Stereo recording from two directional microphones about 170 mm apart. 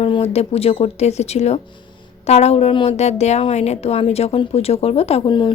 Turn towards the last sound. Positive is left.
turn(degrees=30)  # may be behind; listen again after turning